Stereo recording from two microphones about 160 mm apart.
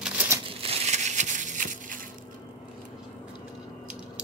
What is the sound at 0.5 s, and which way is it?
Crushing, 35° right (ahead or behind).